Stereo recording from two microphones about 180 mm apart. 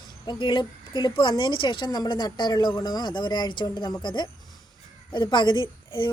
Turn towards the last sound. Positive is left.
turn(degrees=25)  # may be behind; listen again after turning